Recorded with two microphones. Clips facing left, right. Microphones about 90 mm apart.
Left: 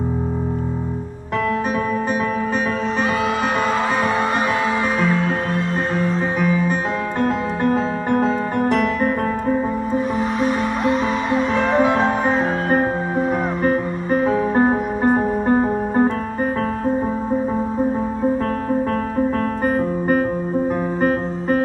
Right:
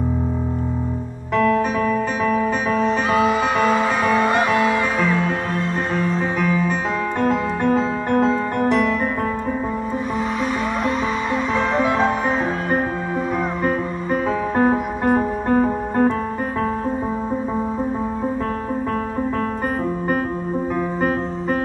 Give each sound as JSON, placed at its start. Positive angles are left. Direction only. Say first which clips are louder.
{"t": 6.1, "sound": "music", "louder": "left 1 dB", "side_deg": 10}
{"t": 8.6, "sound": "music", "louder": "even", "side_deg": 50}
{"t": 11.8, "sound": "music", "louder": "left 2 dB", "side_deg": 30}
{"t": 14.2, "sound": "music", "louder": "left 2 dB", "side_deg": 15}